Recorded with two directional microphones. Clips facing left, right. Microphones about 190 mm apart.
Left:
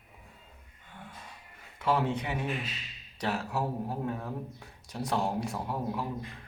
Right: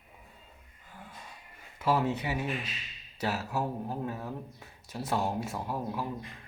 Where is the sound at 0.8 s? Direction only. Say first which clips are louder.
Left 1 dB; centre (ahead or behind).